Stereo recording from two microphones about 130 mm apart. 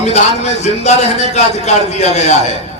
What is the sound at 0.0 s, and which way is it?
A man's voice, 60° left (ahead or behind).